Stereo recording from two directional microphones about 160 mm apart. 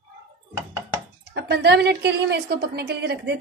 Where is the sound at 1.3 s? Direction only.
90° right.